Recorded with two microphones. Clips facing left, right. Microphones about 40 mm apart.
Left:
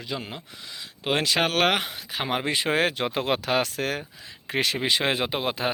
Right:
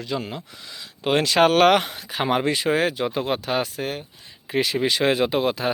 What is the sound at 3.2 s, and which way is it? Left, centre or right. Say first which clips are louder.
Speech: left 2 dB; left.